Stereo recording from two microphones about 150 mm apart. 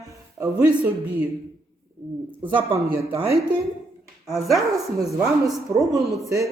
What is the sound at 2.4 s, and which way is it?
Speech, 35° right (ahead or behind).